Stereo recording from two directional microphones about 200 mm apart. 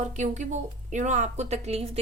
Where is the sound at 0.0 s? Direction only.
35° right (ahead or behind).